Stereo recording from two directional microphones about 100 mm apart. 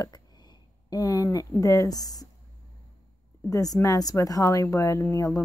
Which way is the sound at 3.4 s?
35° left (ahead or behind).